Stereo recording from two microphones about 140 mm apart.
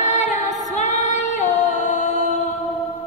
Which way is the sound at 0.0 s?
60° left (ahead or behind).